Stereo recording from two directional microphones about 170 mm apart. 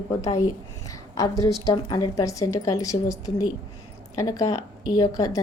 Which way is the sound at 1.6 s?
20° left (ahead or behind).